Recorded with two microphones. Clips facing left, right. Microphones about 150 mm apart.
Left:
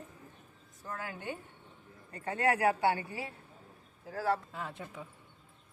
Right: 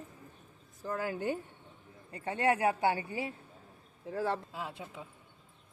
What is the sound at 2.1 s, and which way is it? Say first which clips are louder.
A woman's voice: right 1 dB; 25° right (ahead or behind).